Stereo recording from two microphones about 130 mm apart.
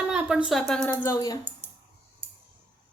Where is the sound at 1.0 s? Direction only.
25° left (ahead or behind).